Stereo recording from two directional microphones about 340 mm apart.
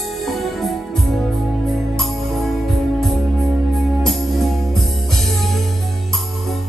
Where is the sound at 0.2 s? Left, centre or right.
Centre.